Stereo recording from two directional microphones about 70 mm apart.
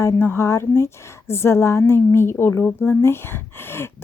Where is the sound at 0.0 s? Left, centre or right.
Left.